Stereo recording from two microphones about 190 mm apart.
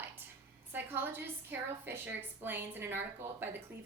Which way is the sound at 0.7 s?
10° right (ahead or behind).